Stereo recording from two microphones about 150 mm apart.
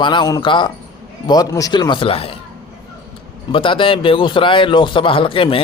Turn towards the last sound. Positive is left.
turn(degrees=35)  # may be behind; listen again after turning